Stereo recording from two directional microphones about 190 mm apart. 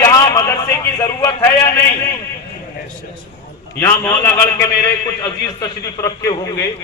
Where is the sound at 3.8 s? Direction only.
15° left (ahead or behind).